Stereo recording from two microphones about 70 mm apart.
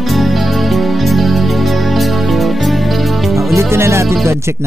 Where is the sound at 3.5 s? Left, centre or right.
Right.